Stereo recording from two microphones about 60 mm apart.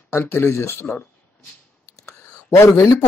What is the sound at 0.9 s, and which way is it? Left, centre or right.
Speech, left.